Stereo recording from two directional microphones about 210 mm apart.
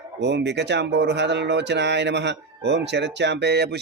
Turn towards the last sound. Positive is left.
turn(degrees=-55)  # may be behind; listen again after turning